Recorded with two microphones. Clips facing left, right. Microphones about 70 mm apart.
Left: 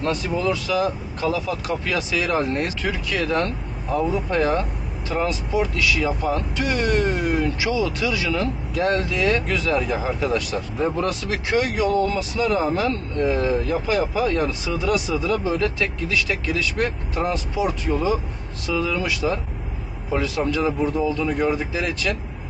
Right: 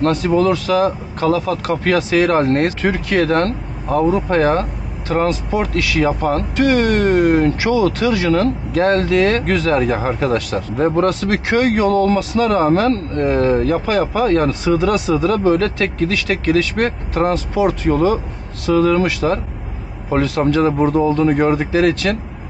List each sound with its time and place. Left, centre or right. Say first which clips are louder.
0.0 s speech: right 8 dB; right